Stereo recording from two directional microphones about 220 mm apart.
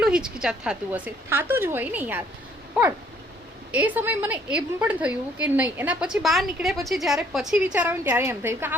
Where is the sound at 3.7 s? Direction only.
5° right (ahead or behind).